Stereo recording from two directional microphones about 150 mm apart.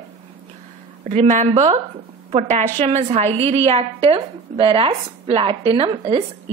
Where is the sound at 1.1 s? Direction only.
50° right (ahead or behind).